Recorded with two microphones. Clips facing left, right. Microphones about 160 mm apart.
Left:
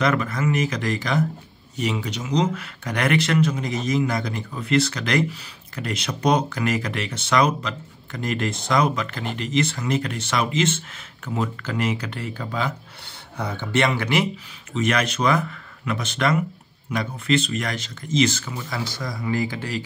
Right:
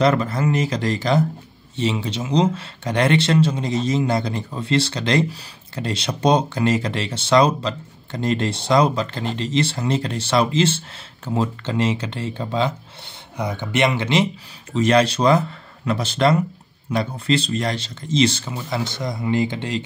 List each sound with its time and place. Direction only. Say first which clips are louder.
0.0 s speech: right 4 dB; 30° right (ahead or behind)
13.4 s speech: right 2 dB; 15° right (ahead or behind)